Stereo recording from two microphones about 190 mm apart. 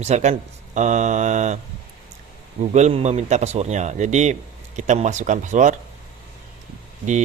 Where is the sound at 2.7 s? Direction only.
35° right (ahead or behind).